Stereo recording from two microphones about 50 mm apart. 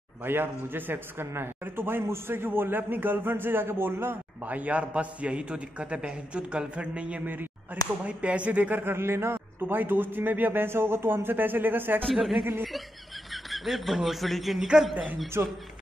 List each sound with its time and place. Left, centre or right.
0.2 s a man's voice: right
4.4 s a man's voice: right
8.7 s a man's voice: right
9.6 s a man's voice: right
12.1 s speech: centre
15.4 s speech: right